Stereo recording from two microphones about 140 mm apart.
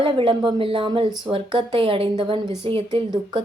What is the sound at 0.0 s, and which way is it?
A woman's voice, 40° right (ahead or behind).